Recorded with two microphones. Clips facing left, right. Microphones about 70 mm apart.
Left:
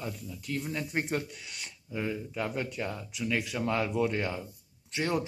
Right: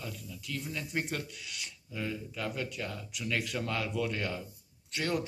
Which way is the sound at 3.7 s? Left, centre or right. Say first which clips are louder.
Left 6 dB; left.